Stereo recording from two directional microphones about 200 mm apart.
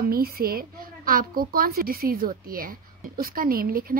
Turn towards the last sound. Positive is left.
turn(degrees=-45)  # may be behind; listen again after turning